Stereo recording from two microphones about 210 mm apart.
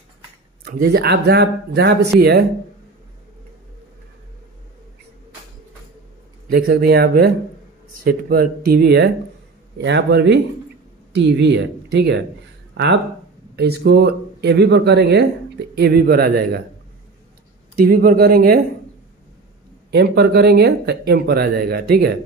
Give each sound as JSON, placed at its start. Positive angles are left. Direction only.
{"t": 0.7, "sound": "speech", "side_deg": -50}
{"t": 6.5, "sound": "speech", "side_deg": -45}
{"t": 17.7, "sound": "speech", "side_deg": -45}
{"t": 19.9, "sound": "speech", "side_deg": -50}